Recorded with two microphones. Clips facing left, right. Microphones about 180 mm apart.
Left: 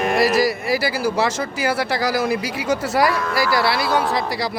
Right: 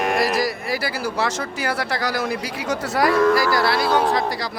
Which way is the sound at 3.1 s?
45° right (ahead or behind).